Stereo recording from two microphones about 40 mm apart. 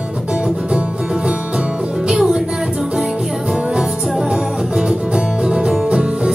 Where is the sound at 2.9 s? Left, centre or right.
Centre.